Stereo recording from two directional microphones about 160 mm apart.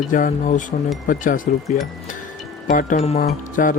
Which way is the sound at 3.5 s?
55° left (ahead or behind).